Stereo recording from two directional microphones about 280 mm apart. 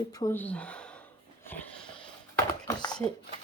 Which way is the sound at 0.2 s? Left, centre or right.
Centre.